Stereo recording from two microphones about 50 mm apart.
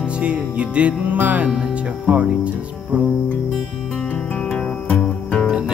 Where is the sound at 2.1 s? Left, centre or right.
Right.